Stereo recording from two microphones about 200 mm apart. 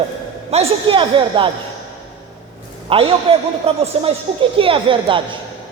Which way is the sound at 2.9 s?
30° right (ahead or behind).